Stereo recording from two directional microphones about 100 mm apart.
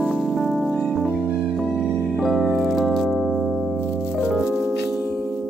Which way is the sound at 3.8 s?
25° left (ahead or behind).